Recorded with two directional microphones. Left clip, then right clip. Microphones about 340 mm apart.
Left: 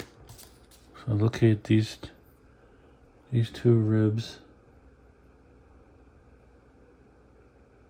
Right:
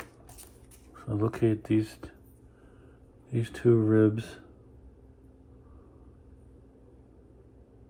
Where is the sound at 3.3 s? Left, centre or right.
Left.